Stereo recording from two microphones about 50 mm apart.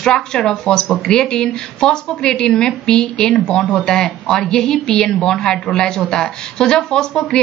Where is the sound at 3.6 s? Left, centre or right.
Left.